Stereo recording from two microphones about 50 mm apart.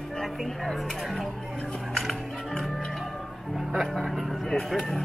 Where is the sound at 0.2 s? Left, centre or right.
Centre.